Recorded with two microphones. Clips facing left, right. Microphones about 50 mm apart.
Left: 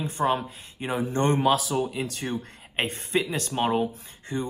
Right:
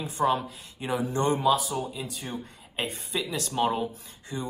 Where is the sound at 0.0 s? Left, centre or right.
Left.